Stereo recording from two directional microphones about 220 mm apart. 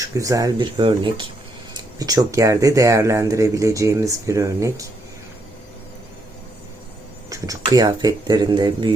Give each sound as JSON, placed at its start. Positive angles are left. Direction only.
{"t": 0.0, "sound": "speech", "side_deg": -15}
{"t": 7.3, "sound": "speech", "side_deg": -15}